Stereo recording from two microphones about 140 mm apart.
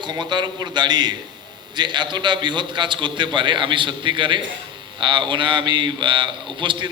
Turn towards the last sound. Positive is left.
turn(degrees=-35)  # may be behind; listen again after turning